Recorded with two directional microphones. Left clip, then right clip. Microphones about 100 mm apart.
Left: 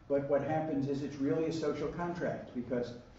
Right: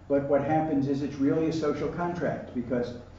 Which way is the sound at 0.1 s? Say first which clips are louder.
Right 7 dB; 15° left (ahead or behind).